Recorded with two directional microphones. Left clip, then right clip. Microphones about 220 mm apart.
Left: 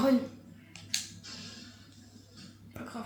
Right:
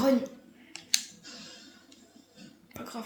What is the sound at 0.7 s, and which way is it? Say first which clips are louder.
Scissors: right 6 dB; 50° right (ahead or behind).